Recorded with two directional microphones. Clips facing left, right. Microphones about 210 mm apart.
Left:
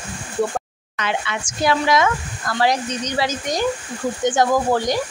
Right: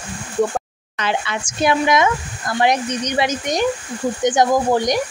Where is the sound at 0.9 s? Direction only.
35° right (ahead or behind).